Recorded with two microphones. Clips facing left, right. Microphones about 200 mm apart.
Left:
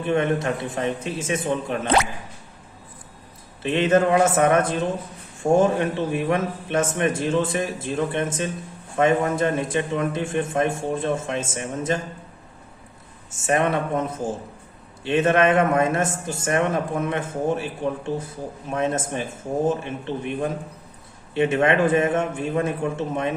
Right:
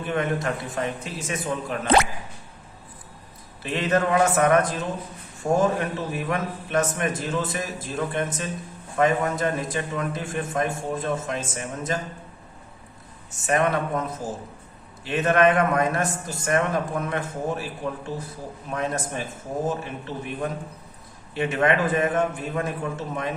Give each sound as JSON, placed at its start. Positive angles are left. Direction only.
{"t": 0.0, "sound": "a man's voice", "side_deg": 25}
{"t": 3.6, "sound": "a man's voice", "side_deg": 25}
{"t": 13.5, "sound": "a man's voice", "side_deg": 25}